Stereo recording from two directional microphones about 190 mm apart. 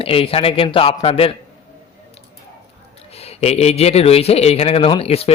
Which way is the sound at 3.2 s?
35° left (ahead or behind).